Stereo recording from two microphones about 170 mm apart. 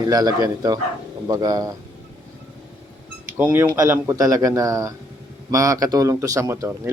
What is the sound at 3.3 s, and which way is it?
A man's voice, 10° right (ahead or behind).